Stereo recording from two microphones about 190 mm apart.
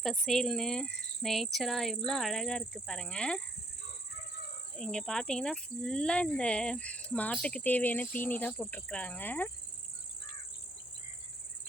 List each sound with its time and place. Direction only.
0.0 s speech: centre (ahead or behind)
4.8 s speech: 5° left (ahead or behind)